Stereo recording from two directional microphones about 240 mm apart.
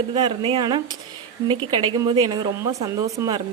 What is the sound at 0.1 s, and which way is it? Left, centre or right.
A woman's voice, centre.